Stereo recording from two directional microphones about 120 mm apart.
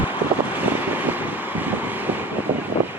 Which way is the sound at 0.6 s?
15° right (ahead or behind).